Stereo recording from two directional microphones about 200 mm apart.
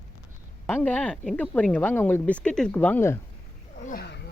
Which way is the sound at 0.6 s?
10° left (ahead or behind).